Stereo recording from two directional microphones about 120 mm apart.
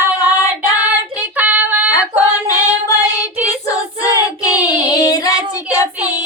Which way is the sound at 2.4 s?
30° left (ahead or behind).